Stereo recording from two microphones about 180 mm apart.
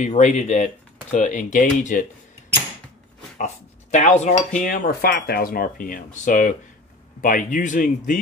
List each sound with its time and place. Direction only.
0.0 s speech: 40° left (ahead or behind)
3.3 s speech: 40° left (ahead or behind)